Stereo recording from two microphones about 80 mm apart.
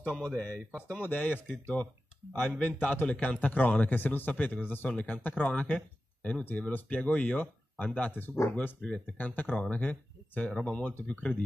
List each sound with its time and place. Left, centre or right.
0.2 s speech: centre
1.0 s a man's voice: left